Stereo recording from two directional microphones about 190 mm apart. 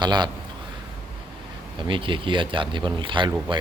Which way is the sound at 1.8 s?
25° right (ahead or behind).